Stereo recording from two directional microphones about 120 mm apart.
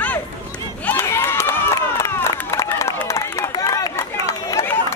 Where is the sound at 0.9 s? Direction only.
25° left (ahead or behind).